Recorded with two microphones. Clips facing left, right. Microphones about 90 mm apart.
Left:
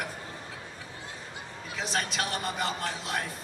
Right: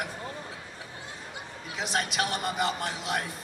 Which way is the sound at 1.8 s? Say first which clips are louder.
Right 2 dB; 20° right (ahead or behind).